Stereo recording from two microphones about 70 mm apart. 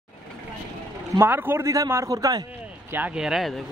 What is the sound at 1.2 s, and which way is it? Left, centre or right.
Speech, right.